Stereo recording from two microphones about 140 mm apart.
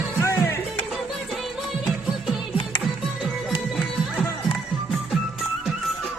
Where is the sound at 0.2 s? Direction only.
20° left (ahead or behind).